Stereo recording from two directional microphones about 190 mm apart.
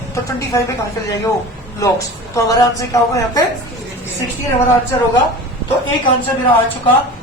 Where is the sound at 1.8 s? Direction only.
15° left (ahead or behind).